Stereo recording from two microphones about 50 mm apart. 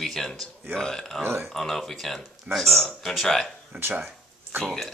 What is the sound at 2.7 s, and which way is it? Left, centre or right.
Speech, centre.